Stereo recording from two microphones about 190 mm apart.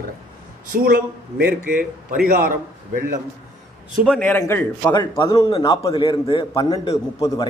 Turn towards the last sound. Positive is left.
turn(degrees=20)  # may be behind; listen again after turning